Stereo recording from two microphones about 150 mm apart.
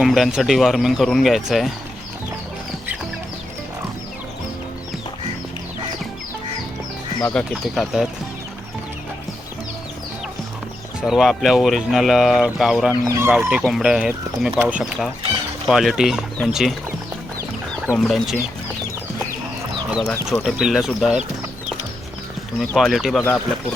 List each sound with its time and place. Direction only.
0.0 s speech: centre (ahead or behind)
7.2 s speech: 15° left (ahead or behind)
7.5 s speech: centre (ahead or behind)
11.0 s speech: centre (ahead or behind)
13.1 s speech: 20° right (ahead or behind)
13.7 s speech: 5° right (ahead or behind)
17.9 s speech: centre (ahead or behind)
19.9 s speech: centre (ahead or behind)
22.6 s speech: centre (ahead or behind)